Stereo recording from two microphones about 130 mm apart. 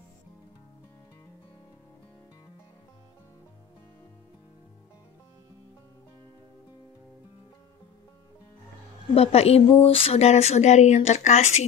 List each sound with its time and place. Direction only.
9.1 s speech: 50° left (ahead or behind)